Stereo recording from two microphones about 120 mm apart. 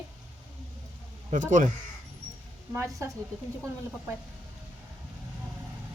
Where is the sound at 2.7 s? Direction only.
25° right (ahead or behind).